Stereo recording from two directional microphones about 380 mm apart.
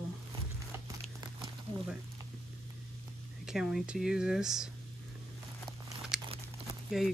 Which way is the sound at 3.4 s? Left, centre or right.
Centre.